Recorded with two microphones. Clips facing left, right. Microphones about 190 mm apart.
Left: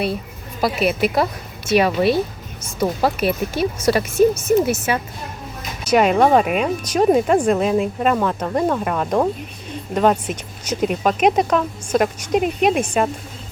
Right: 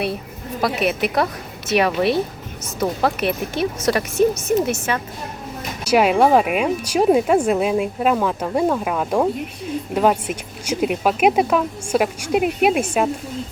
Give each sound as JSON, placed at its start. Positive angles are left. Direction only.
{"t": 0.6, "sound": "a woman's voice", "side_deg": 0}
{"t": 5.8, "sound": "speech", "side_deg": -10}